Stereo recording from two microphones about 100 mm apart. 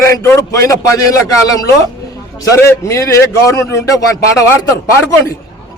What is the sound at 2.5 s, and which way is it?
A man's voice, 30° left (ahead or behind).